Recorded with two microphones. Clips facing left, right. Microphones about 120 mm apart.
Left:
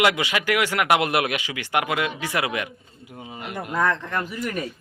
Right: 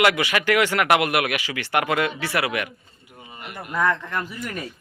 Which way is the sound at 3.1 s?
20° left (ahead or behind).